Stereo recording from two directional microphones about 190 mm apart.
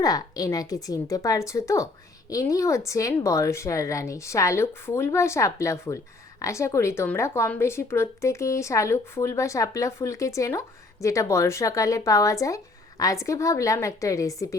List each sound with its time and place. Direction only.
0.0 s a woman's voice: 20° left (ahead or behind)